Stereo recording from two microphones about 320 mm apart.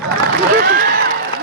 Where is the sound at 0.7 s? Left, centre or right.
Right.